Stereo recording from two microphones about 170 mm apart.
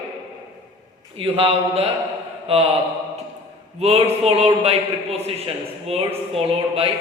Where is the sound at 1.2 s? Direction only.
35° right (ahead or behind).